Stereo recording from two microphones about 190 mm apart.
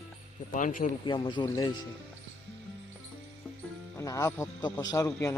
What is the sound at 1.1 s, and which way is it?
Speech, 25° left (ahead or behind).